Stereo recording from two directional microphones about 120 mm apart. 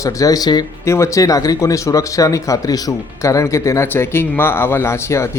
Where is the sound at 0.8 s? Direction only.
25° left (ahead or behind).